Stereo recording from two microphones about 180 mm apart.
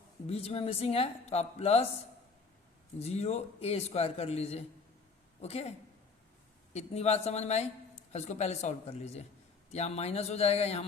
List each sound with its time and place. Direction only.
0.3 s a woman's voice: 35° left (ahead or behind)
3.0 s a woman's voice: 35° left (ahead or behind)
6.7 s a woman's voice: 35° left (ahead or behind)